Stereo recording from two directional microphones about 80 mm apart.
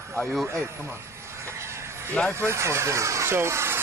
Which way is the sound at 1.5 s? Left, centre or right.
Right.